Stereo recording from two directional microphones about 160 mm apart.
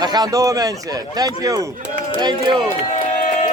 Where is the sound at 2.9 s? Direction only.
50° left (ahead or behind).